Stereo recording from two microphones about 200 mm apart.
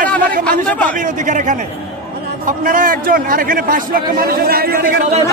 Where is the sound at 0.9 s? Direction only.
40° right (ahead or behind).